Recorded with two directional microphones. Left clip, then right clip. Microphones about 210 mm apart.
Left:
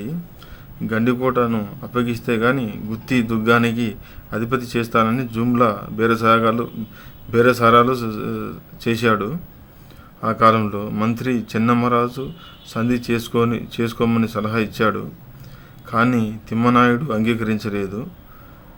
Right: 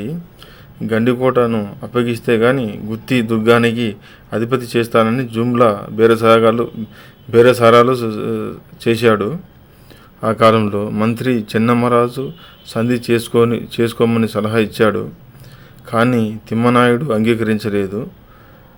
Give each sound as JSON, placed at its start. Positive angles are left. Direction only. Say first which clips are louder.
{"t": 0.9, "sound": "a man's voice", "louder": "right 5 dB", "side_deg": -15}